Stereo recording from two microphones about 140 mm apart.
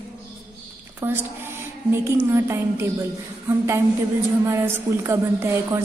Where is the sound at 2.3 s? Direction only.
20° right (ahead or behind).